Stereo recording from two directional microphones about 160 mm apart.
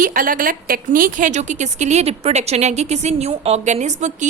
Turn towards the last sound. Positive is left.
turn(degrees=-45)  # may be behind; listen again after turning